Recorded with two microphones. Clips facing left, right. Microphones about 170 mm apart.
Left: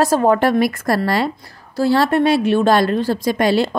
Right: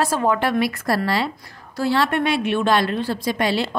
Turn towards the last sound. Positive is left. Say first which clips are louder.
# left 5 dB
turn(degrees=45)  # may be behind; listen again after turning